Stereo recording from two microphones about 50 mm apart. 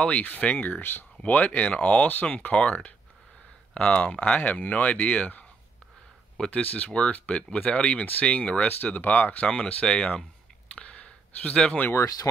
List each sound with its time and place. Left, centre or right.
0.2 s speech: left
1.2 s speech: left
6.6 s speech: left
10.7 s a sound: left